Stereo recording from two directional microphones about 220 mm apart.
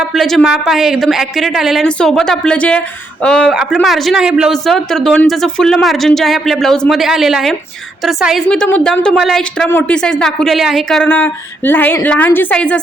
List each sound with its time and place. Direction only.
0.0 s speech: centre (ahead or behind)